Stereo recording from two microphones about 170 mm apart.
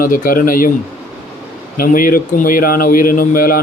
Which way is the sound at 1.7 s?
55° left (ahead or behind).